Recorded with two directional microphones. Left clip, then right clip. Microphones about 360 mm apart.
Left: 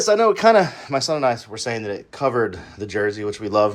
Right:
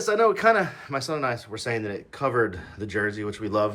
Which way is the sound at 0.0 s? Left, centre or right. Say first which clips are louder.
Left 5 dB; centre.